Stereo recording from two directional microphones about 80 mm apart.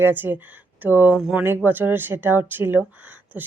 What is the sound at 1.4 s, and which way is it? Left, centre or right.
A woman's voice, right.